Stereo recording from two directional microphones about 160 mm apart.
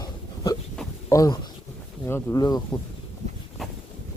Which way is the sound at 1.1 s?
20° left (ahead or behind).